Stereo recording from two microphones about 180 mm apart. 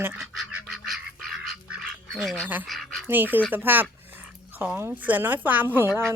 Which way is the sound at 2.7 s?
Centre (ahead or behind).